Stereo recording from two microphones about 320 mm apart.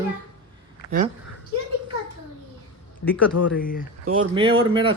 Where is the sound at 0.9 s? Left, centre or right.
Right.